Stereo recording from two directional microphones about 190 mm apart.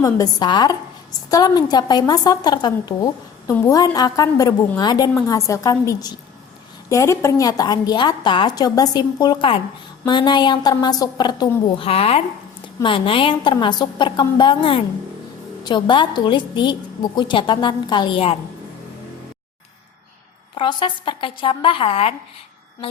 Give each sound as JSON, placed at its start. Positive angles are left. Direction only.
{"t": 0.0, "sound": "a woman's voice", "side_deg": 20}
{"t": 20.6, "sound": "a woman's voice", "side_deg": 25}